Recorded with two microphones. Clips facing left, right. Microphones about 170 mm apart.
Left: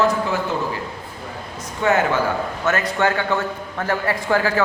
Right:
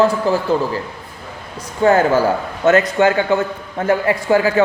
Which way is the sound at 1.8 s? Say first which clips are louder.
Right 6 dB; 35° right (ahead or behind).